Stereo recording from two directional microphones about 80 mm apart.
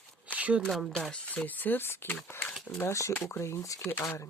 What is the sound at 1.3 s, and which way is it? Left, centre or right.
Speech, centre.